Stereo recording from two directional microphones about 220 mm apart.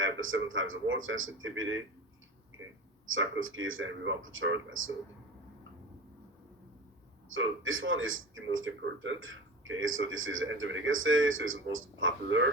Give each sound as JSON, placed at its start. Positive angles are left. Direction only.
{"t": 0.0, "sound": "a man's voice", "side_deg": -65}
{"t": 3.1, "sound": "a man's voice", "side_deg": -65}
{"t": 7.3, "sound": "a man's voice", "side_deg": -65}